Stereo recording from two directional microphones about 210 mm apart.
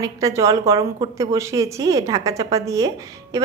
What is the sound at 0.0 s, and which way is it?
A woman's voice, 15° right (ahead or behind).